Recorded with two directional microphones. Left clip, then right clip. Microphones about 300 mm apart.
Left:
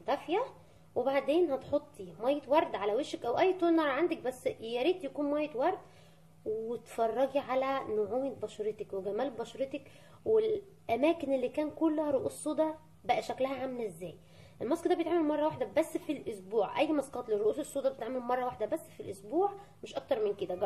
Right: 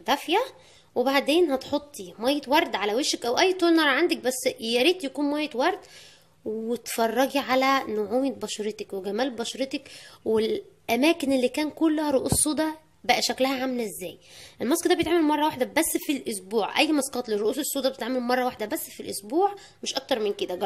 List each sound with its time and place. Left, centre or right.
0.0 s a woman's voice: right
7.0 s a woman's voice: right